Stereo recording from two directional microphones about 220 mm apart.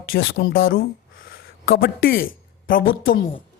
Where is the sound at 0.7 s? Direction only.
40° left (ahead or behind).